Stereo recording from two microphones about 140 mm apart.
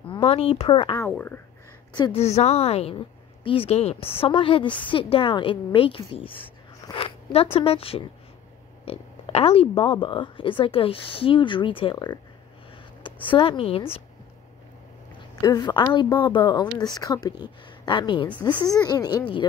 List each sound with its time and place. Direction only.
0.0 s speech: 40° left (ahead or behind)
0.9 s speech: 15° left (ahead or behind)
2.1 s a woman's voice: 50° left (ahead or behind)
4.6 s speech: 10° left (ahead or behind)
4.9 s speech: 40° left (ahead or behind)
7.5 s a woman's voice: 45° left (ahead or behind)
15.4 s speech: 30° left (ahead or behind)
18.3 s speech: 10° left (ahead or behind)
18.7 s speech: 25° left (ahead or behind)